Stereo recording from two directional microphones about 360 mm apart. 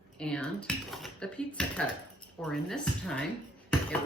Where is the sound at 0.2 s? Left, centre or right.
Centre.